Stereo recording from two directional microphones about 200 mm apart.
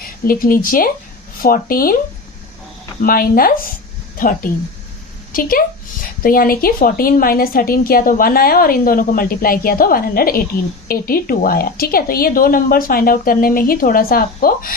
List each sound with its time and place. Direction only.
0.3 s a woman's voice: 45° left (ahead or behind)
3.0 s a woman's voice: 45° left (ahead or behind)